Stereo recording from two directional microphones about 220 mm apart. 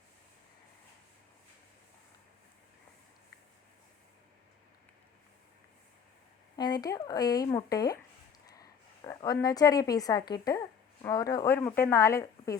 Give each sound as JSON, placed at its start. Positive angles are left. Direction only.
{"t": 6.6, "sound": "speech", "side_deg": 20}
{"t": 9.0, "sound": "speech", "side_deg": 15}